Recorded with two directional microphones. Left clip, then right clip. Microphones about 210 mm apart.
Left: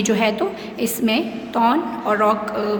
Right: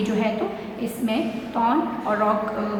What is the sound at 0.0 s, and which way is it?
A woman's voice, 50° left (ahead or behind).